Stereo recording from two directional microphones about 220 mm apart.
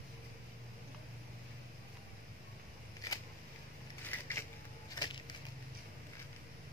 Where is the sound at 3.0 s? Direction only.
15° left (ahead or behind).